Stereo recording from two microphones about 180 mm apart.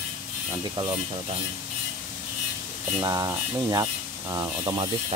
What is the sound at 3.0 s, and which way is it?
Speech, 20° right (ahead or behind).